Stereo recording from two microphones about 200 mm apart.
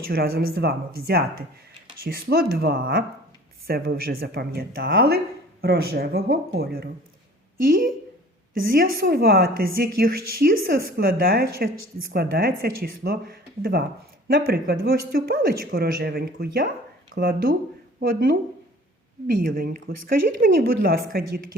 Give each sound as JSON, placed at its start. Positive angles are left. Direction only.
{"t": 0.1, "sound": "a woman's voice", "side_deg": -50}